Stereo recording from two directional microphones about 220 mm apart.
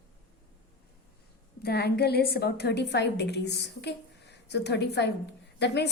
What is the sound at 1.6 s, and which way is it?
A woman's voice, 45° left (ahead or behind).